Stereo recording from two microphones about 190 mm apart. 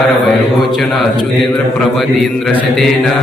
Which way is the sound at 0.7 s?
Centre (ahead or behind).